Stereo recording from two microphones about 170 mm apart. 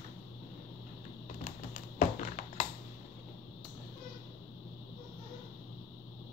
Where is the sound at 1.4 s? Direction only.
50° left (ahead or behind).